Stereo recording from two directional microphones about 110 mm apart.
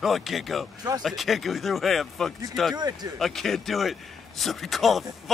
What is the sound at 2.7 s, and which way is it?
Speech, 40° right (ahead or behind).